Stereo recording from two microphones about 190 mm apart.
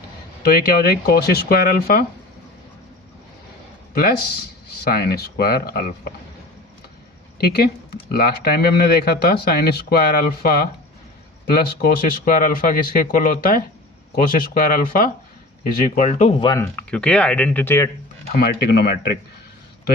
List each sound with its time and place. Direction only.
0.4 s speech: 50° left (ahead or behind)
4.8 s speech: 55° left (ahead or behind)
7.3 s speech: 55° left (ahead or behind); by 16.3 s 40° left (ahead or behind)
16.4 s speech: 20° left (ahead or behind)
16.7 s speech: 5° left (ahead or behind)
18.3 s speech: 50° left (ahead or behind)